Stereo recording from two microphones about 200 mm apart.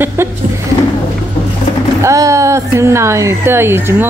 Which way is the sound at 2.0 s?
15° right (ahead or behind).